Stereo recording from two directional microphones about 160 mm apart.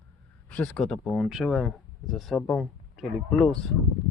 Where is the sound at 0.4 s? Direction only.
5° left (ahead or behind).